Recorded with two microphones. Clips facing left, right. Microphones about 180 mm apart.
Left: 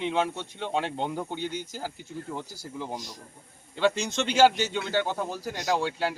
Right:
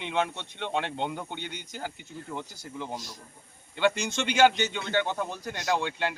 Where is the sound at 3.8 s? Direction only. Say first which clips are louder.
Left 1 dB; centre (ahead or behind).